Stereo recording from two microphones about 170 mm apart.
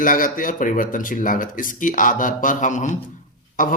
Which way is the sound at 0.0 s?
55° left (ahead or behind).